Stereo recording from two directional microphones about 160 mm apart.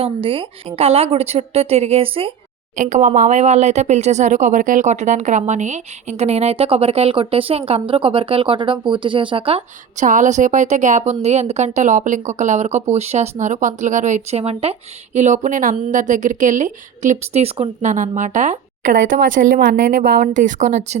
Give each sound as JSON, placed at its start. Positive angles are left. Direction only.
{"t": 0.0, "sound": "a woman's voice", "side_deg": -35}
{"t": 2.7, "sound": "speech", "side_deg": -50}
{"t": 10.1, "sound": "speech", "side_deg": -50}